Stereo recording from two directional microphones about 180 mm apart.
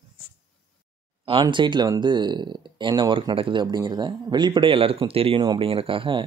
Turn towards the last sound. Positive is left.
turn(degrees=-30)  # may be behind; listen again after turning